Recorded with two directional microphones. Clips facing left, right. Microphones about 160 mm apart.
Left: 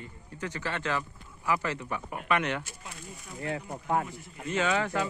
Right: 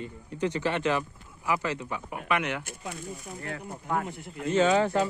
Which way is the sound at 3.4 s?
25° left (ahead or behind).